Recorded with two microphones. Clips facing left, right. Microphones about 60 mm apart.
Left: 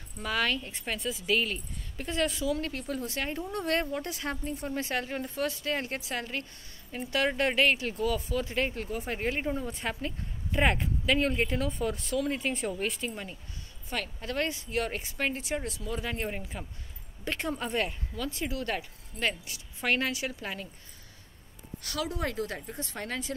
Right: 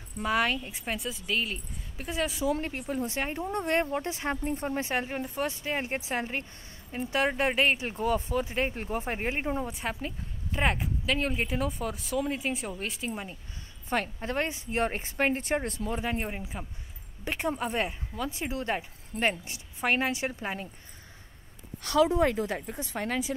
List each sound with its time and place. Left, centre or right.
0.2 s a woman's voice: centre
2.6 s speech: right
8.5 s speech: centre
8.8 s a woman's voice: right; by 13.1 s centre
13.1 s a woman's voice: centre
13.8 s speech: right
16.0 s a woman's voice: right
21.8 s speech: right; by 23.3 s centre